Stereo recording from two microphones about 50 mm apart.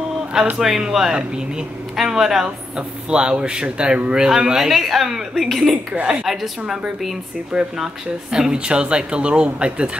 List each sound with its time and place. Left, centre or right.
0.6 s a woman's voice: centre
7.5 s speech: centre